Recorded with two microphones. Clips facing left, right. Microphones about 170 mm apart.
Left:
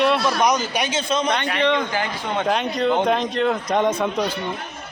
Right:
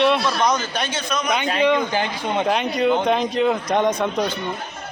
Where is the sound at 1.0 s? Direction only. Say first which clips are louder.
Left 3 dB; 25° left (ahead or behind).